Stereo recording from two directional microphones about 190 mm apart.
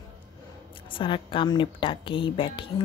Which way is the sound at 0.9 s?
25° left (ahead or behind).